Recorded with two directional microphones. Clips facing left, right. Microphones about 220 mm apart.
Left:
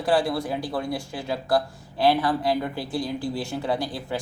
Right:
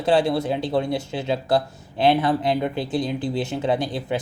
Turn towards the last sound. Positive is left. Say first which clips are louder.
# right 4 dB
turn(degrees=-20)  # may be behind; listen again after turning